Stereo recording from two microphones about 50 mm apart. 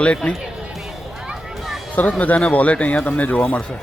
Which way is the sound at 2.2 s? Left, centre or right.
Left.